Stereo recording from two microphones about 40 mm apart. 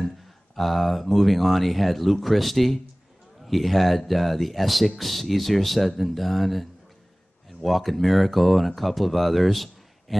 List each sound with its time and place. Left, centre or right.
0.6 s speech: centre